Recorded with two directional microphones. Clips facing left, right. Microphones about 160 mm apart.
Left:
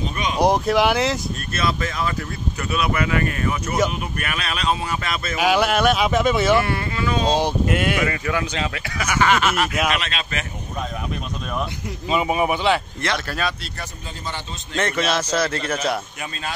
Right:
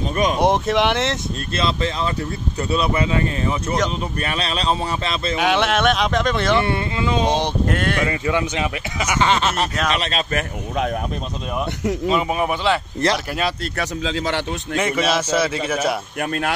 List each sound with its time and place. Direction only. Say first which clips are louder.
0.4 s speech: left 3 dB; centre (ahead or behind)
1.5 s speech: right 2 dB; 25° right (ahead or behind)
5.4 s speech: left 1 dB; centre (ahead or behind)
6.6 s speech: right 2 dB; 25° right (ahead or behind)
7.3 s speech: left 1 dB; 5° left (ahead or behind)
8.1 s speech: right 3 dB; 20° right (ahead or behind)
9.2 s speech: left 1 dB; 30° right (ahead or behind)
12.1 s speech: left 2 dB; 5° left (ahead or behind)
13.3 s speech: right 2 dB; 25° right (ahead or behind)
13.7 s speech: right 11 dB; 85° right
14.8 s speech: right 1 dB; 5° right (ahead or behind)
16.2 s speech: right 8 dB; 60° right (ahead or behind)